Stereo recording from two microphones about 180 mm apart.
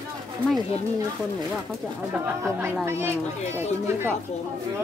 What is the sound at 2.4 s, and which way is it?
Speech, 15° right (ahead or behind).